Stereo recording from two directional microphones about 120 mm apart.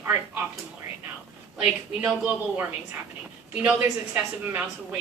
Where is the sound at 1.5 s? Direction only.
15° right (ahead or behind).